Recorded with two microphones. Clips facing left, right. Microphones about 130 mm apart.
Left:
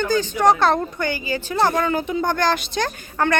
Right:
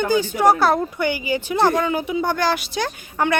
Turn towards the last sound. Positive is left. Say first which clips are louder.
# even
turn(degrees=-10)  # may be behind; listen again after turning